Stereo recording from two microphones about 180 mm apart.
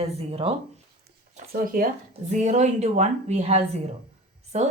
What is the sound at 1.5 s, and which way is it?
Speech, 50° right (ahead or behind).